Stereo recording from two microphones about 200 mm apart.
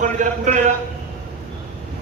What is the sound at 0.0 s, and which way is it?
Speech, 35° right (ahead or behind).